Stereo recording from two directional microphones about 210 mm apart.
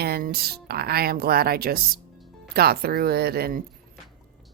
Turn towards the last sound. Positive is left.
turn(degrees=-45)  # may be behind; listen again after turning